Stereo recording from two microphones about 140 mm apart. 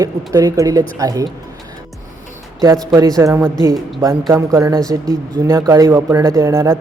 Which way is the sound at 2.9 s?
25° right (ahead or behind).